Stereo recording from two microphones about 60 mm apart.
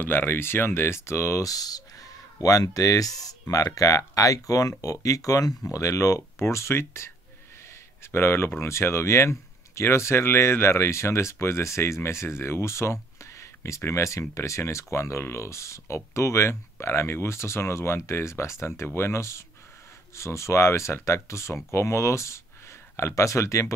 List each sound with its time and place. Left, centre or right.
0.0 s speech: left
1.4 s speech: left
3.4 s speech: left
6.4 s speech: left